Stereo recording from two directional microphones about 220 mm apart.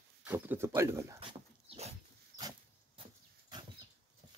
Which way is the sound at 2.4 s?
15° right (ahead or behind).